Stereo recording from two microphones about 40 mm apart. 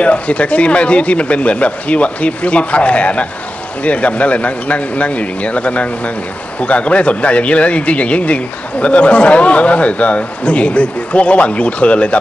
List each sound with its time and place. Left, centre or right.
0.0 s speech: left